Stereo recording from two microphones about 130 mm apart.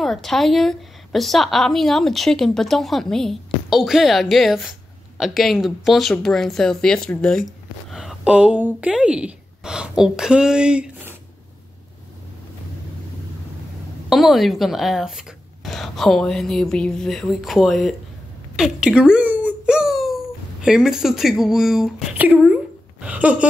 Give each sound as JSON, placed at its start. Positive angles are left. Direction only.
{"t": 0.0, "sound": "a woman's voice", "side_deg": 0}
{"t": 14.0, "sound": "speech", "side_deg": 0}
{"t": 18.6, "sound": "a sound", "side_deg": -5}
{"t": 20.6, "sound": "speech", "side_deg": -5}